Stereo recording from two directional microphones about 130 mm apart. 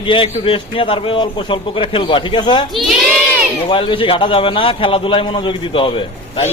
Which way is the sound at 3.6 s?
45° left (ahead or behind).